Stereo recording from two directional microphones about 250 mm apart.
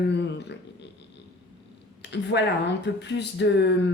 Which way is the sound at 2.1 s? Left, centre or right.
Left.